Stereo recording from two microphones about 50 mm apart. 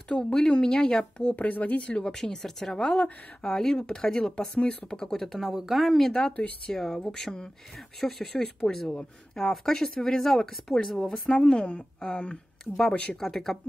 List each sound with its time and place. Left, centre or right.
0.2 s a woman's voice: centre
1.3 s speech: left; by 2.8 s centre
2.8 s speech: centre
5.5 s speech: centre
6.1 s a woman's voice: centre
8.4 s a woman's voice: centre
12.7 s speech: centre